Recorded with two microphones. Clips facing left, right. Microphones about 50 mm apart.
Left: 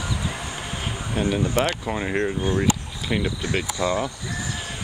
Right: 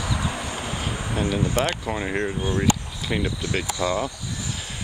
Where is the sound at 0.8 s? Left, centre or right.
Centre.